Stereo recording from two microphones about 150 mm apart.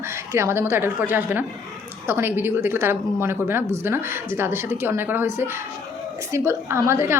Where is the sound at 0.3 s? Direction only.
15° right (ahead or behind).